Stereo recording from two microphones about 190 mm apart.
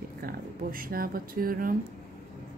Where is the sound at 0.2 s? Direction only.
50° right (ahead or behind).